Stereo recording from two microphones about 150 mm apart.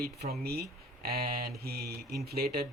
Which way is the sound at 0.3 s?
90° right.